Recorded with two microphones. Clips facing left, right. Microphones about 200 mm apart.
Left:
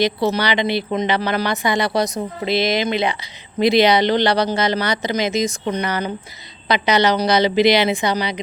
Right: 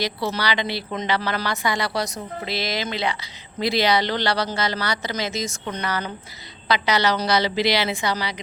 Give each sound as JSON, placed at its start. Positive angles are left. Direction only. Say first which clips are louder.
{"t": 0.3, "sound": "a woman's voice", "louder": "left 6 dB", "side_deg": 20}